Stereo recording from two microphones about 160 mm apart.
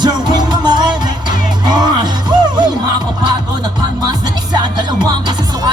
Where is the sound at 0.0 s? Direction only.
25° right (ahead or behind).